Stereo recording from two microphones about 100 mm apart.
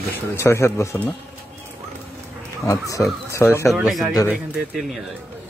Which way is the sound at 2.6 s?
35° left (ahead or behind).